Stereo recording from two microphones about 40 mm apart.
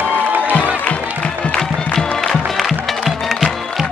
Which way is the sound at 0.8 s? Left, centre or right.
Left.